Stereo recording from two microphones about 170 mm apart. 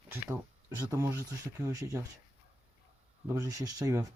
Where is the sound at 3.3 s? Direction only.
20° right (ahead or behind).